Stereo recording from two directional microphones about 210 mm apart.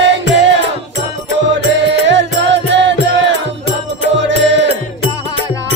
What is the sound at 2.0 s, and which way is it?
Music, 60° right (ahead or behind).